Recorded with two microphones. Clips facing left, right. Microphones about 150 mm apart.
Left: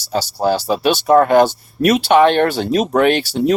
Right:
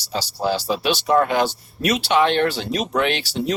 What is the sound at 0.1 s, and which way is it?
Speech, 50° left (ahead or behind).